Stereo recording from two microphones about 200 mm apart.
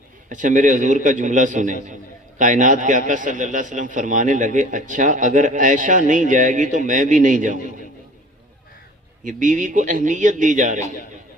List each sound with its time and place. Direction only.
0.3 s a man's voice: 40° right (ahead or behind)
9.2 s a man's voice: 40° right (ahead or behind)